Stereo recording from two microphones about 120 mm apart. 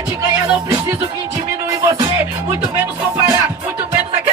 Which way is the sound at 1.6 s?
30° right (ahead or behind).